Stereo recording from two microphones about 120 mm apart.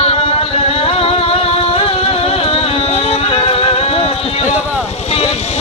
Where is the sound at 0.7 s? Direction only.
55° left (ahead or behind).